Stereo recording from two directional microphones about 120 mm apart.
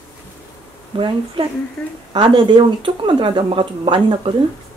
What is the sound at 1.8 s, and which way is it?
Speech, 5° left (ahead or behind).